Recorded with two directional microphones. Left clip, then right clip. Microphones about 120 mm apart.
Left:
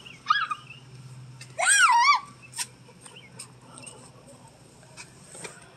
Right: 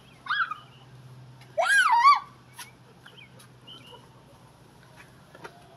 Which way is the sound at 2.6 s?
45° left (ahead or behind).